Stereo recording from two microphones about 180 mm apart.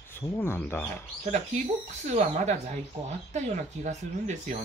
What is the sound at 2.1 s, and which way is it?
Speech, 40° right (ahead or behind).